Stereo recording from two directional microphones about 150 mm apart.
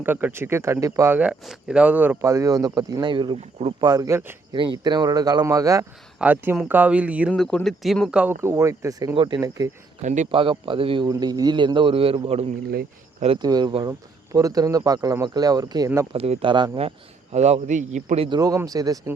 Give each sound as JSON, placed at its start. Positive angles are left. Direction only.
{"t": 0.0, "sound": "speech", "side_deg": -15}
{"t": 4.5, "sound": "speech", "side_deg": -30}
{"t": 6.1, "sound": "speech", "side_deg": -10}
{"t": 7.3, "sound": "speech", "side_deg": 5}
{"t": 10.0, "sound": "a man's voice", "side_deg": -55}
{"t": 10.3, "sound": "a man's voice", "side_deg": -35}
{"t": 13.4, "sound": "speech", "side_deg": -25}
{"t": 16.1, "sound": "a man's voice", "side_deg": -40}
{"t": 17.3, "sound": "a man's voice", "side_deg": -45}
{"t": 18.3, "sound": "speech", "side_deg": -25}